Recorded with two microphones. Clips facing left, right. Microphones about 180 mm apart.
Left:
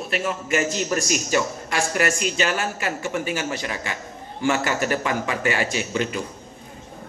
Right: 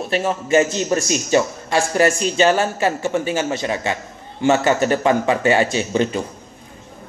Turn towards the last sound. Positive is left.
turn(degrees=-25)  # may be behind; listen again after turning